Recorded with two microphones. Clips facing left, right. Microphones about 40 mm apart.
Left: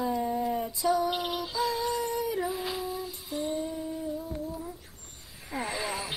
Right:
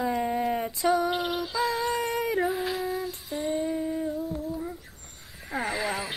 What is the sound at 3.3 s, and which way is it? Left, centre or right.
Humming, right.